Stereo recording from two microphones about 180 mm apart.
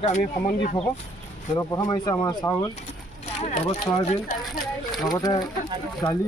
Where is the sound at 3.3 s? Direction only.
40° left (ahead or behind).